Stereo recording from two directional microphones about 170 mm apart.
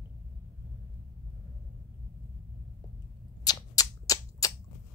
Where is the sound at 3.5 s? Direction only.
20° left (ahead or behind).